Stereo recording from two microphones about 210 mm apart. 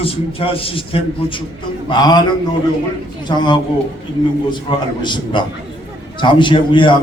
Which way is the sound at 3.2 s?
20° left (ahead or behind).